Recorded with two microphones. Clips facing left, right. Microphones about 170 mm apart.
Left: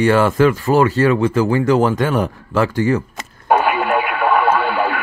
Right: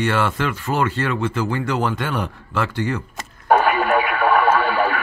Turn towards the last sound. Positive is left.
turn(degrees=0)  # may be behind; listen again after turning